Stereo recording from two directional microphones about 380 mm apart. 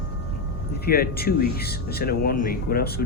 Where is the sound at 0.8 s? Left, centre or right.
Left.